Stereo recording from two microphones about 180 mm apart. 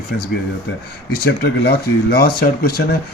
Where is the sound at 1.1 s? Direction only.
60° left (ahead or behind).